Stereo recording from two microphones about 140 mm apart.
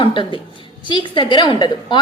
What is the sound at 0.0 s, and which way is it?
A woman's voice, 35° left (ahead or behind).